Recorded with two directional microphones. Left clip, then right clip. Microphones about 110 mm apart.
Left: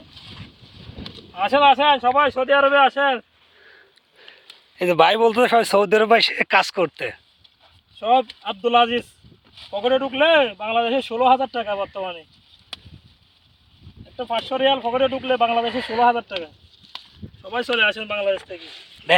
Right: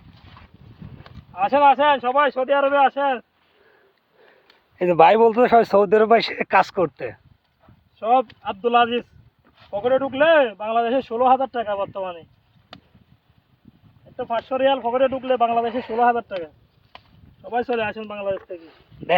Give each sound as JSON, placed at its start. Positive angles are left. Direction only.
{"t": 2.1, "sound": "speech", "side_deg": 90}
{"t": 4.8, "sound": "speech", "side_deg": -20}
{"t": 5.0, "sound": "speech", "side_deg": -10}
{"t": 6.8, "sound": "speech", "side_deg": 0}
{"t": 7.9, "sound": "speech", "side_deg": 25}
{"t": 9.6, "sound": "speech", "side_deg": 10}
{"t": 14.2, "sound": "speech", "side_deg": 15}
{"t": 17.5, "sound": "speech", "side_deg": -90}